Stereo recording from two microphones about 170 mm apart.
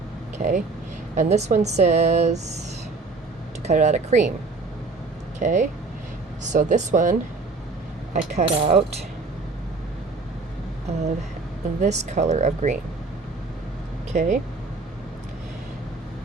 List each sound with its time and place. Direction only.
0.3 s speech: 45° right (ahead or behind)
3.6 s speech: 45° right (ahead or behind)
5.4 s speech: 45° right (ahead or behind)
11.8 s speech: 45° right (ahead or behind)
14.1 s speech: 45° right (ahead or behind)